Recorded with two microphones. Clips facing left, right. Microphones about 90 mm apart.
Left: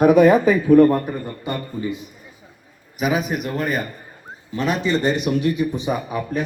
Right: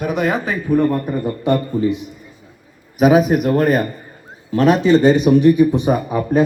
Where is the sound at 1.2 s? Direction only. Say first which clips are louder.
Right 10 dB; 90° right.